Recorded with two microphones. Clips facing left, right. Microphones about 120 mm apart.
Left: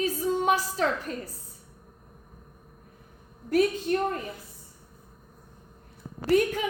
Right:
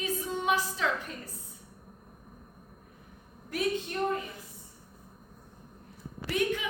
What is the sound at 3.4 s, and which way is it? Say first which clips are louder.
Speech: left 8 dB; 45° left (ahead or behind).